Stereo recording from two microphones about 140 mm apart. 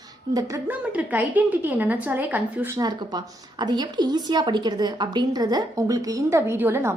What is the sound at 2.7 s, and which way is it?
A woman's voice, 30° right (ahead or behind).